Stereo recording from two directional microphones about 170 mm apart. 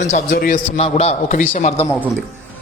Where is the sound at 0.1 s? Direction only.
55° left (ahead or behind).